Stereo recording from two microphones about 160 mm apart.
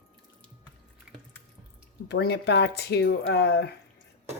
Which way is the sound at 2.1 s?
90° left.